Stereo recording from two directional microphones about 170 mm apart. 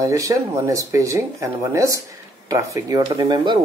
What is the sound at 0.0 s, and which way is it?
Speech, 20° right (ahead or behind).